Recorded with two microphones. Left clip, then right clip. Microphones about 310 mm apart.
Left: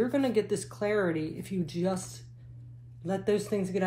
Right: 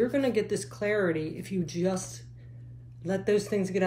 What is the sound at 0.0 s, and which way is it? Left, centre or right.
Speech, centre.